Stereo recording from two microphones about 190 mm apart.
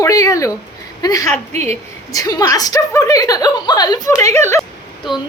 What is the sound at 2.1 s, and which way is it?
A woman's voice, 20° left (ahead or behind).